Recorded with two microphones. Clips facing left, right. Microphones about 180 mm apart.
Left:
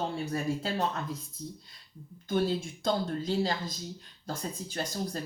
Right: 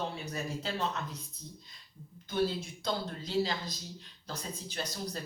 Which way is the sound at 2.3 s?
50° left (ahead or behind).